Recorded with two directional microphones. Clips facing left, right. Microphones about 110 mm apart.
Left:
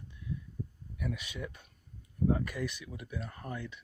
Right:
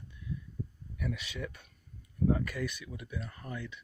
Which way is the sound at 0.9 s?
25° left (ahead or behind).